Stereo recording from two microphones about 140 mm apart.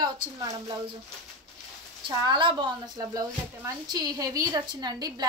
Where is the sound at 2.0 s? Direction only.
35° right (ahead or behind).